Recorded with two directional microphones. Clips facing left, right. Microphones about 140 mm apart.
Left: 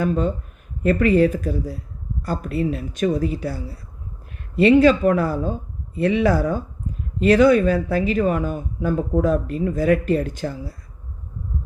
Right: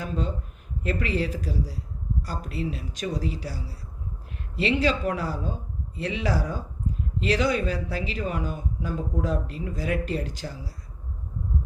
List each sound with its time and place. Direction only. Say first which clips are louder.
0.0 s speech: left 9 dB; 55° left (ahead or behind)